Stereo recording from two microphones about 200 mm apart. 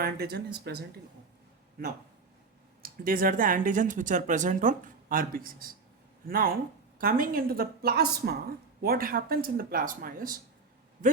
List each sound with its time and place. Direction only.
0.0 s a woman's voice: 50° right (ahead or behind)
2.8 s a woman's voice: 45° right (ahead or behind)